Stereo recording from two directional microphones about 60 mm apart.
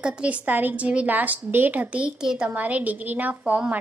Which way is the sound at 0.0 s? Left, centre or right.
Right.